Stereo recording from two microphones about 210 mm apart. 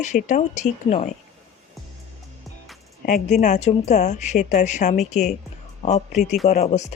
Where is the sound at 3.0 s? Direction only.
40° left (ahead or behind).